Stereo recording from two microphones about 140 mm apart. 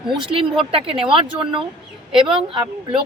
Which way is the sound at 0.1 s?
35° right (ahead or behind).